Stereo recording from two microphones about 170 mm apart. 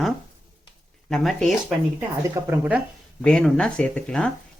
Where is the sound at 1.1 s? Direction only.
Centre (ahead or behind).